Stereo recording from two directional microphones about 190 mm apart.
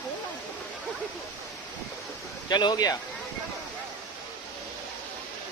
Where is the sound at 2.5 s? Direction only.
20° left (ahead or behind).